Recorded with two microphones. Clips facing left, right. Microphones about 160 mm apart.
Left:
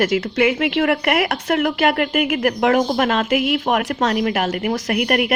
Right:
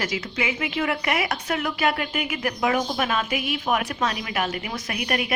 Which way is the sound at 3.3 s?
75° left (ahead or behind).